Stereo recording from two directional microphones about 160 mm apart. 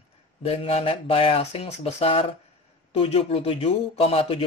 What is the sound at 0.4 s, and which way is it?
A man's voice, 35° left (ahead or behind).